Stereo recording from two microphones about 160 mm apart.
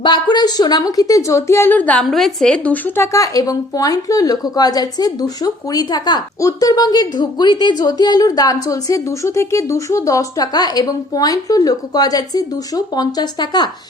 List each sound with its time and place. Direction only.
0.0 s a woman's voice: 30° left (ahead or behind)